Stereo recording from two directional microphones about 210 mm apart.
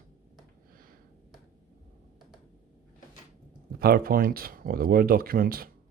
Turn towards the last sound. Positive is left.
turn(degrees=-45)  # may be behind; listen again after turning